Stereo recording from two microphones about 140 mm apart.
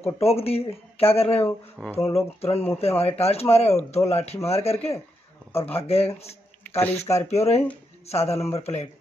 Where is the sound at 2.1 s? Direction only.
45° left (ahead or behind).